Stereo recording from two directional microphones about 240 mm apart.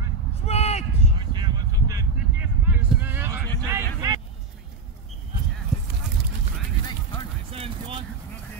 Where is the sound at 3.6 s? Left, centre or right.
Centre.